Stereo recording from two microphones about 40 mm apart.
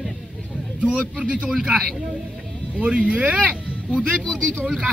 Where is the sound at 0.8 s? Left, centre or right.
Right.